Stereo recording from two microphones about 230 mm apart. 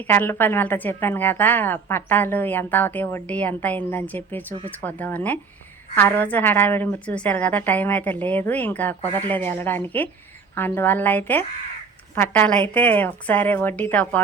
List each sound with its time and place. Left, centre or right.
0.1 s a woman's voice: centre